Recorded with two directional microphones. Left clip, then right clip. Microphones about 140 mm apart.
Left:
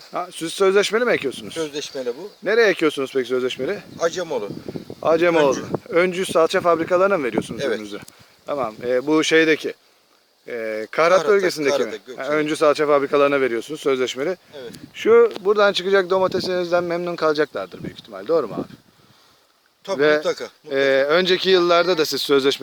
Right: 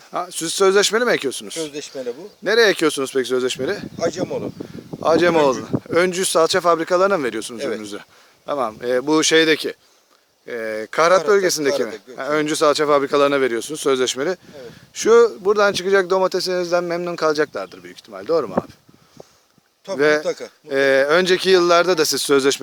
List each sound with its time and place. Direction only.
0.1 s speech: 25° right (ahead or behind)
1.5 s speech: 5° left (ahead or behind)
2.4 s speech: 25° right (ahead or behind)
3.9 s speech: 5° left (ahead or behind)
5.0 s speech: 25° right (ahead or behind)
20.0 s speech: 20° right (ahead or behind)
20.2 s speech: 5° left (ahead or behind)
20.7 s speech: 25° right (ahead or behind)